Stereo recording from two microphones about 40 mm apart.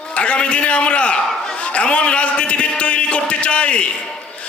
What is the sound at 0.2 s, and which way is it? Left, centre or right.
A man's voice, left.